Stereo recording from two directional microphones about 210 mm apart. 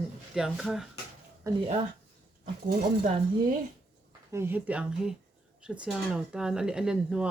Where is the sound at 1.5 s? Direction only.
15° right (ahead or behind).